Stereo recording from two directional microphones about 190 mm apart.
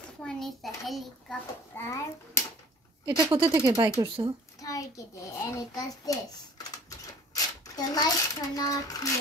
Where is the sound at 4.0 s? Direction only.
20° right (ahead or behind).